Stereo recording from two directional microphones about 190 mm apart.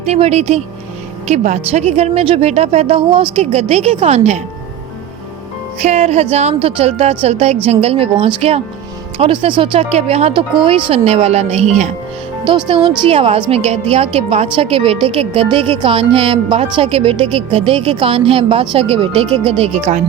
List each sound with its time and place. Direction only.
0.0 s speech: 35° right (ahead or behind)
5.8 s a woman's voice: 35° right (ahead or behind)